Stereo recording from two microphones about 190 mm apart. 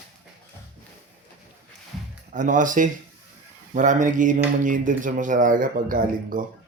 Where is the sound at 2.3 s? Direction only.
40° right (ahead or behind).